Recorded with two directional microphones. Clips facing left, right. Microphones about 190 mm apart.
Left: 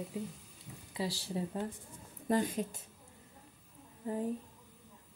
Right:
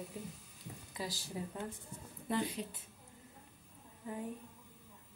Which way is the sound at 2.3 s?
45° left (ahead or behind).